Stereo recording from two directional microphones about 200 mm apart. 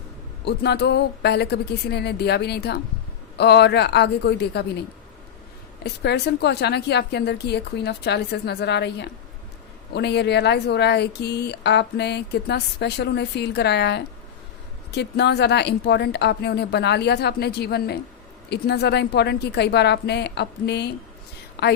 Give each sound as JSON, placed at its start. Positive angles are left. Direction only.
{"t": 0.4, "sound": "speech", "side_deg": 55}
{"t": 5.8, "sound": "speech", "side_deg": 55}